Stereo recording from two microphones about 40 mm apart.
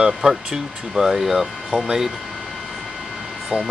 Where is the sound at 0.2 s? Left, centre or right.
Right.